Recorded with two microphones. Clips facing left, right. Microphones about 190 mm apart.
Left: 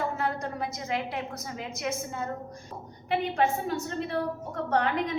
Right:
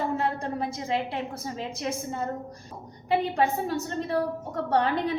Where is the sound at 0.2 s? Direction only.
30° right (ahead or behind).